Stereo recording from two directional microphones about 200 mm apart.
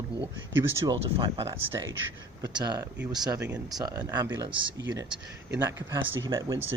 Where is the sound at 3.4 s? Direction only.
5° right (ahead or behind).